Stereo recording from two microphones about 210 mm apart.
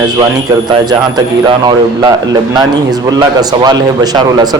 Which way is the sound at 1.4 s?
20° right (ahead or behind).